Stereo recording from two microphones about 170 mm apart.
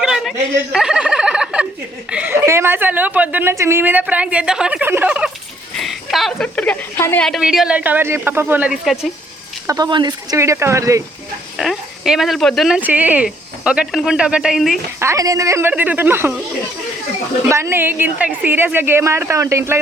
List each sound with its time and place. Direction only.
0.0 s a sound: centre (ahead or behind)
2.0 s a woman's voice: 10° right (ahead or behind)
9.6 s a woman's voice: 20° right (ahead or behind)
11.5 s a woman's voice: centre (ahead or behind)
14.9 s a woman's voice: 15° right (ahead or behind)
17.5 s a woman's voice: 15° right (ahead or behind)